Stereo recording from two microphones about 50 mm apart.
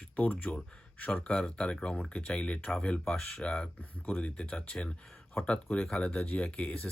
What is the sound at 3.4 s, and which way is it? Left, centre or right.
Speech, left.